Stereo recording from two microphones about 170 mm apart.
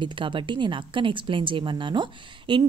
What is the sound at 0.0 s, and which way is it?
Speech, 30° right (ahead or behind).